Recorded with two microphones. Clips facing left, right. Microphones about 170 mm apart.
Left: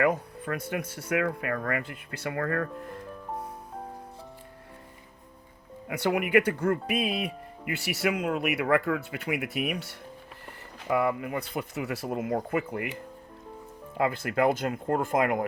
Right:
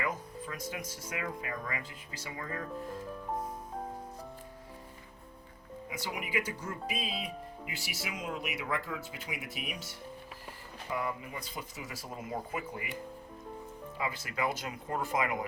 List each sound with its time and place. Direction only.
0.0 s speech: 60° left (ahead or behind)
2.6 s music: centre (ahead or behind)
5.9 s speech: 65° left (ahead or behind)
13.9 s speech: 55° left (ahead or behind)